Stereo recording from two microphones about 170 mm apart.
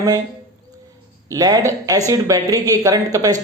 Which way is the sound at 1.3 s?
20° right (ahead or behind).